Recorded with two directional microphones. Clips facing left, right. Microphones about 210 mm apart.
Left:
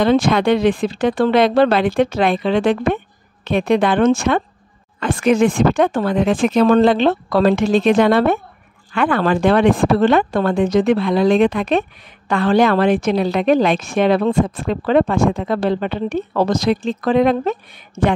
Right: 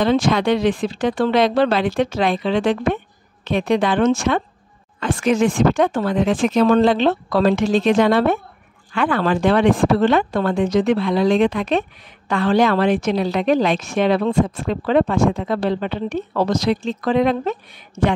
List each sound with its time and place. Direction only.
0.0 s a woman's voice: 55° left (ahead or behind)